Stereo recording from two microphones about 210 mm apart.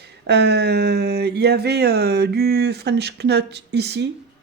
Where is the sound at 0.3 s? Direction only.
50° right (ahead or behind).